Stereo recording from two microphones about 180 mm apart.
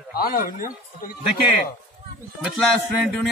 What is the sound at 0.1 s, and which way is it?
A man's voice, 55° left (ahead or behind).